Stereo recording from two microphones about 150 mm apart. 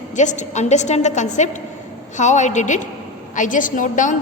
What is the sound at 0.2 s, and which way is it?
A woman's voice, 55° left (ahead or behind).